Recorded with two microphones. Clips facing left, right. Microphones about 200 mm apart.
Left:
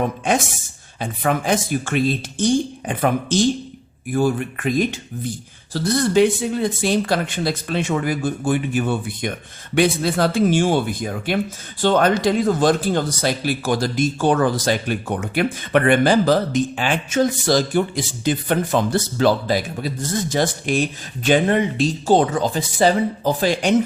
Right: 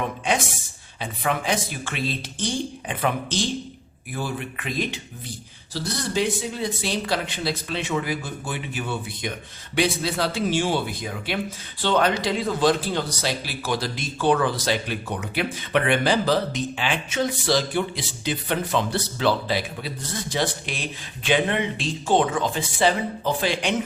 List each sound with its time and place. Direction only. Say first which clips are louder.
0.3 s speech: left 4 dB; 45° left (ahead or behind)